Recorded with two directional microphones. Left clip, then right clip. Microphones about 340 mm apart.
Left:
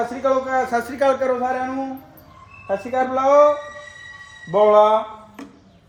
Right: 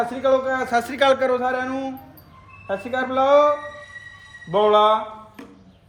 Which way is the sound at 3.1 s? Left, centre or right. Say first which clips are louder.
Left 1 dB; centre.